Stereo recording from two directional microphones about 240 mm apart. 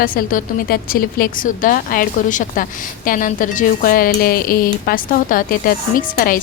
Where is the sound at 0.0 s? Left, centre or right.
Left.